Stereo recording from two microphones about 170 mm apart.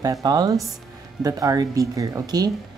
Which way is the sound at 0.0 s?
20° right (ahead or behind).